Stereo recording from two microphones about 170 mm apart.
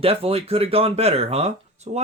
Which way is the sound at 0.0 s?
35° right (ahead or behind).